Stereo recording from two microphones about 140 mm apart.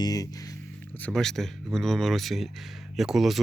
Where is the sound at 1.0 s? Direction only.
5° left (ahead or behind).